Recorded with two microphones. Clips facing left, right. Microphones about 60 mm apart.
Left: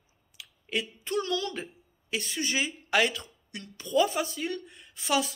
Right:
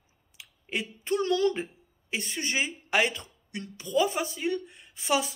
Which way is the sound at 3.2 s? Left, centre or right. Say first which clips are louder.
Right 4 dB; right.